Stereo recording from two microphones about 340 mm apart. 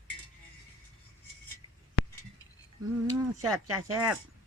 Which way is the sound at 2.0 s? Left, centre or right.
Left.